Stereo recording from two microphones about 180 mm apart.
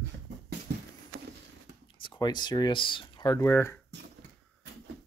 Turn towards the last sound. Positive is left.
turn(degrees=15)  # may be behind; listen again after turning